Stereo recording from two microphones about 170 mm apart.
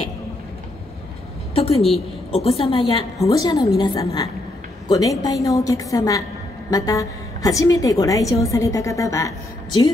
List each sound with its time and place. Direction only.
1.5 s a woman's voice: 35° left (ahead or behind)
1.8 s a woman's voice: centre (ahead or behind)
2.3 s a woman's voice: 35° left (ahead or behind)
3.2 s a woman's voice: 20° left (ahead or behind)